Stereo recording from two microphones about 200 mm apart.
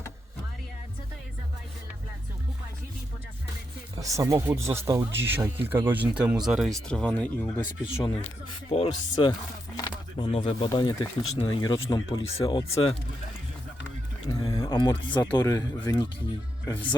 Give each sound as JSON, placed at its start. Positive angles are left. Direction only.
{"t": 4.0, "sound": "speech", "side_deg": -15}
{"t": 8.7, "sound": "speech", "side_deg": 25}
{"t": 14.3, "sound": "speech", "side_deg": 20}